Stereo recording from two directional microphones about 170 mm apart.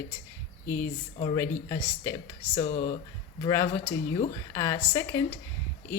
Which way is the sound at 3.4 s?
15° left (ahead or behind).